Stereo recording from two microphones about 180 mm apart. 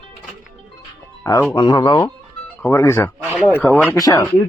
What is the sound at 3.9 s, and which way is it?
Speech, 20° left (ahead or behind).